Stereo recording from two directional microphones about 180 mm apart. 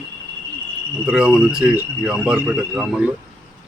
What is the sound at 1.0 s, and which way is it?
Speech, 5° right (ahead or behind).